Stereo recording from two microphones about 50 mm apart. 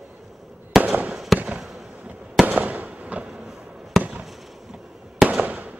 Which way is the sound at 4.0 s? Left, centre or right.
Right.